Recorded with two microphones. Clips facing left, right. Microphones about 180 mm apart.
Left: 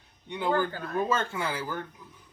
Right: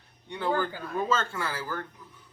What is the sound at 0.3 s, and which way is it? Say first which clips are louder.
Speech: left 1 dB; 15° left (ahead or behind).